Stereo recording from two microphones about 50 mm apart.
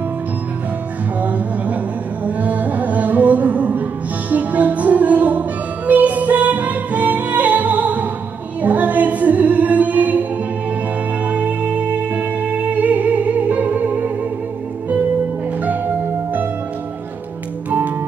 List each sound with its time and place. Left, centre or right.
2.2 s music: right
11.2 s music: right
17.6 s music: right